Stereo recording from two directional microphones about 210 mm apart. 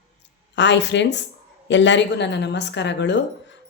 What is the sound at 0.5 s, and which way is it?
A woman's voice, 55° left (ahead or behind).